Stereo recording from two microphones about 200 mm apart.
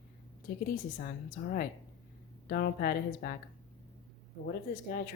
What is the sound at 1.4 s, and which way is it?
Speech, 50° left (ahead or behind).